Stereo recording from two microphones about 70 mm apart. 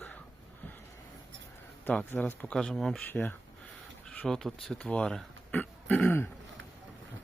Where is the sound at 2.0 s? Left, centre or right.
Left.